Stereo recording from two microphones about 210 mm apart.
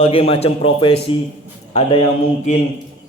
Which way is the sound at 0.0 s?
25° left (ahead or behind).